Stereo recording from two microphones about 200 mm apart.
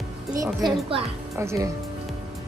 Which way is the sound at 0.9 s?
25° right (ahead or behind).